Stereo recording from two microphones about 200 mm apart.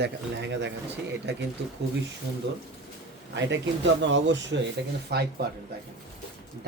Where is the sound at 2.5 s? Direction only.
60° right (ahead or behind).